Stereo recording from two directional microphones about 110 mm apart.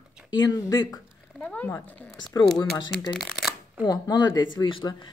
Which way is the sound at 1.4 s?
15° left (ahead or behind).